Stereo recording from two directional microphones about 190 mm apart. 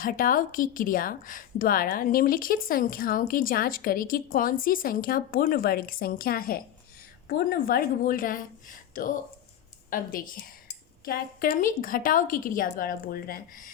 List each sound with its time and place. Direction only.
0.0 s a woman's voice: 50° left (ahead or behind)